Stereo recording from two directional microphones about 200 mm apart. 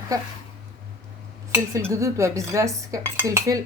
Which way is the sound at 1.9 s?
15° right (ahead or behind).